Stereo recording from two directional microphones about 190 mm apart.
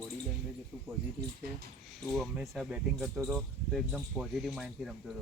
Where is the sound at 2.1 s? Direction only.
Centre (ahead or behind).